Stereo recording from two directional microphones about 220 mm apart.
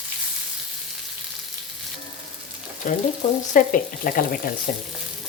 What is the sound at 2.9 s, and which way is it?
Frying, 35° left (ahead or behind).